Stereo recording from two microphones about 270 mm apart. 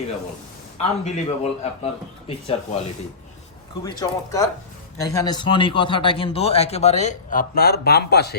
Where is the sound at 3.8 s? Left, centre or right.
Centre; by 8.4 s left.